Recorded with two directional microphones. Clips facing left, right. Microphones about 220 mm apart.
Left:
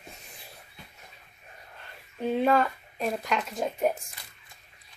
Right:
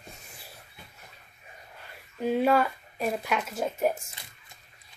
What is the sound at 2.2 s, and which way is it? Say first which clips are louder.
Speech: even; 5° right (ahead or behind).